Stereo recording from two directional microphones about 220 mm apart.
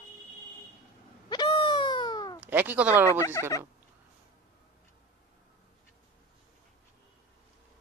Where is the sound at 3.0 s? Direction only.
15° left (ahead or behind).